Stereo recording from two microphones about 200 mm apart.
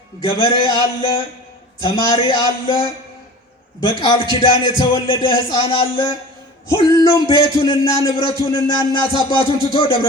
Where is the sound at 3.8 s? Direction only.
20° left (ahead or behind).